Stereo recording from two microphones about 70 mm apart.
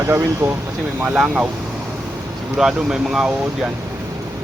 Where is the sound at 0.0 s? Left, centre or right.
Right.